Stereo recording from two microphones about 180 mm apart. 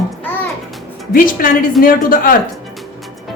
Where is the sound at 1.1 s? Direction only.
50° left (ahead or behind).